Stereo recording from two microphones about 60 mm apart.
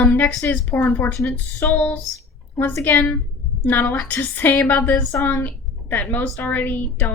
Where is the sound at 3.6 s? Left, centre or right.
Left.